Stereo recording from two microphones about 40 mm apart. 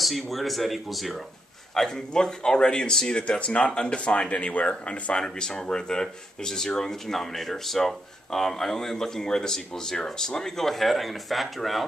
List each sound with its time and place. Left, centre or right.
0.0 s speech: centre
1.8 s speech: centre; by 5.2 s left
5.2 s speech: centre
10.7 s speech: centre